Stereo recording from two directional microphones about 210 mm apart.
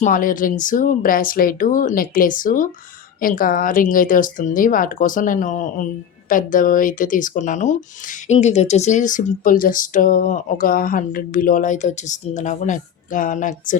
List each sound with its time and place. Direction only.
0.0 s speech: 40° left (ahead or behind)